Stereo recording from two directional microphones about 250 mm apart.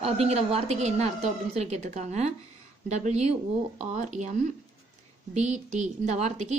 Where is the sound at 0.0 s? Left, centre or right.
Right.